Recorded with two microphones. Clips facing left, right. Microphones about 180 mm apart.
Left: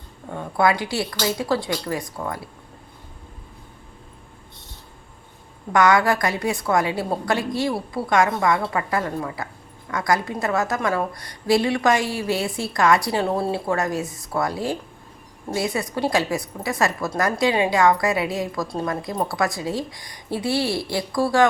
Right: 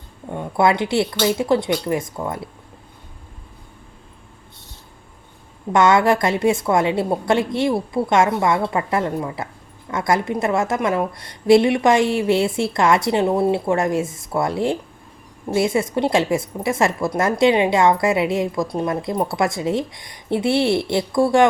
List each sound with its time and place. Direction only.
0.3 s a woman's voice: 20° right (ahead or behind)
5.7 s a woman's voice: 25° right (ahead or behind)